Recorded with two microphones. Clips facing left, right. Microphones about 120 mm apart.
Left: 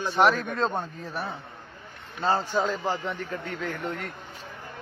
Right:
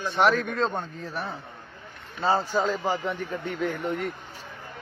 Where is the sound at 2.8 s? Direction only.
10° right (ahead or behind).